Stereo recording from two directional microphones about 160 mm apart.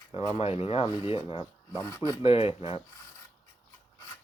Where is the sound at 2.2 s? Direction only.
35° left (ahead or behind).